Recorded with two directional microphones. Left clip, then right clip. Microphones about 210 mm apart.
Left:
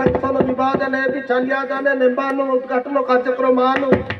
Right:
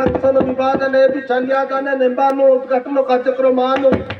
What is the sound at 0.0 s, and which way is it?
Speech, 15° right (ahead or behind).